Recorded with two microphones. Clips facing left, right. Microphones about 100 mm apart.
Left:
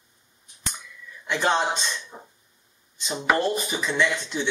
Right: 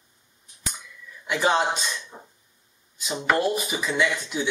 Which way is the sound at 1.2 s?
5° right (ahead or behind).